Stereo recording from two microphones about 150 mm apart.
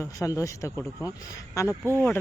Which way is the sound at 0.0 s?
20° left (ahead or behind).